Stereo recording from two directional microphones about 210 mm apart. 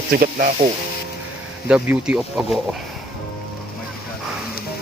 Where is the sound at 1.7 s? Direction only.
5° right (ahead or behind).